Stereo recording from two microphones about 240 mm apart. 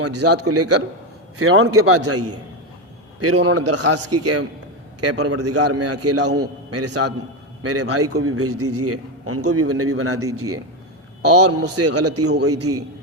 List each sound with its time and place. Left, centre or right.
0.0 s a man's voice: right